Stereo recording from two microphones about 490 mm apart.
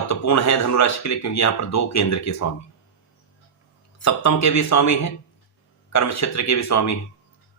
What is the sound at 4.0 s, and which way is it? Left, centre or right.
Speech, left.